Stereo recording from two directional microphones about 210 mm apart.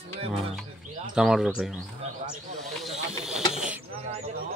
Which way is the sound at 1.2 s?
Centre (ahead or behind).